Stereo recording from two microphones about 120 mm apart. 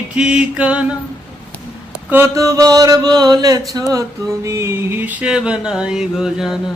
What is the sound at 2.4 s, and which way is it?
Music, 30° right (ahead or behind).